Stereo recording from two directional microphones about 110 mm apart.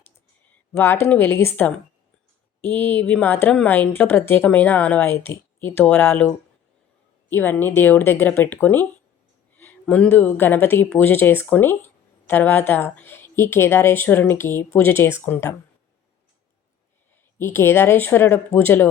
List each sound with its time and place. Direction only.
0.7 s a woman's voice: 20° left (ahead or behind)
17.3 s a woman's voice: 20° left (ahead or behind)